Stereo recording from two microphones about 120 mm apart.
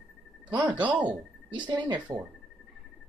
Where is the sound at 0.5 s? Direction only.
40° right (ahead or behind).